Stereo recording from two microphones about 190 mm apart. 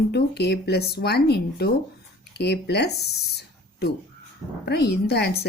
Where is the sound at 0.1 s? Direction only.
60° left (ahead or behind).